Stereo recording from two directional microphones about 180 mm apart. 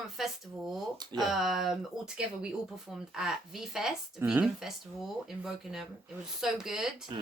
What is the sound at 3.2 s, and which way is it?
A woman's voice, centre (ahead or behind).